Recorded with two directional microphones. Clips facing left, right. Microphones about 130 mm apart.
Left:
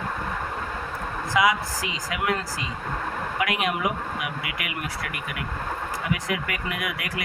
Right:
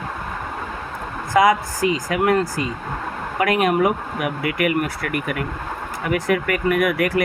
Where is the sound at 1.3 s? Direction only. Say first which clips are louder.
Right 7 dB; 50° right (ahead or behind).